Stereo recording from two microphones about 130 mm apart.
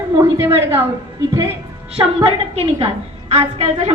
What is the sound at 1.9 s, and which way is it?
A woman's voice, 50° right (ahead or behind).